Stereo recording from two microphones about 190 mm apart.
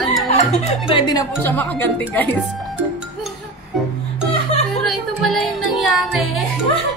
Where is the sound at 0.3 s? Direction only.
35° left (ahead or behind).